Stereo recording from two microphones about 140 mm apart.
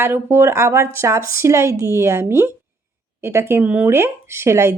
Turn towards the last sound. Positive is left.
turn(degrees=-20)  # may be behind; listen again after turning